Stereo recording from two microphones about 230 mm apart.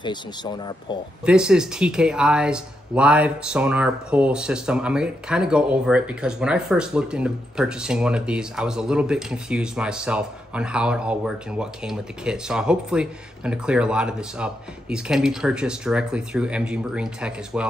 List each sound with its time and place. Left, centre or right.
0.0 s speech: centre
1.2 s speech: centre